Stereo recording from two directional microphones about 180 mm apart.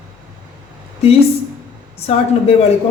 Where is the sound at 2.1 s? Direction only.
35° left (ahead or behind).